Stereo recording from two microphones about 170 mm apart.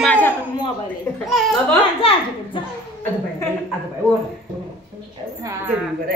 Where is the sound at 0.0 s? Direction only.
10° left (ahead or behind).